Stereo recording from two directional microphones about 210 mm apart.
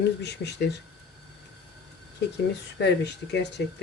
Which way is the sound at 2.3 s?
55° left (ahead or behind).